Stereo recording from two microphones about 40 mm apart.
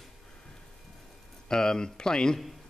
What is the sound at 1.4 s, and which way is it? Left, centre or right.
Speech, centre.